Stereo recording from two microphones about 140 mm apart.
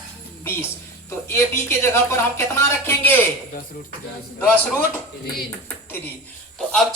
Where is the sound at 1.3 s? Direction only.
20° left (ahead or behind).